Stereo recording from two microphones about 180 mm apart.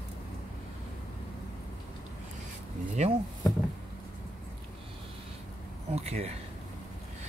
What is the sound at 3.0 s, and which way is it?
Speech, 35° right (ahead or behind).